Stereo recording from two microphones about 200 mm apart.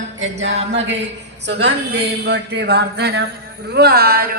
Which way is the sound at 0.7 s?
60° right (ahead or behind).